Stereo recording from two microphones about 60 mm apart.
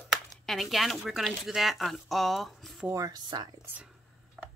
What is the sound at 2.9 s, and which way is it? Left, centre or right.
Speech, right.